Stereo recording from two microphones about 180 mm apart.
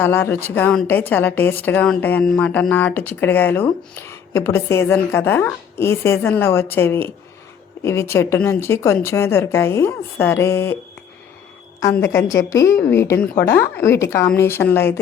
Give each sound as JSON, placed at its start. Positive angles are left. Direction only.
{"t": 0.0, "sound": "a woman's voice", "side_deg": 10}
{"t": 11.8, "sound": "a woman's voice", "side_deg": 15}